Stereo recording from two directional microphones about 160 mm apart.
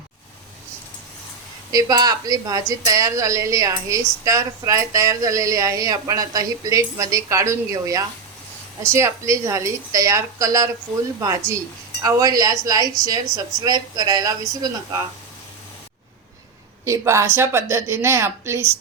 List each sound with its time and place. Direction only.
1.7 s a woman's voice: 25° right (ahead or behind)
16.8 s a woman's voice: 20° right (ahead or behind)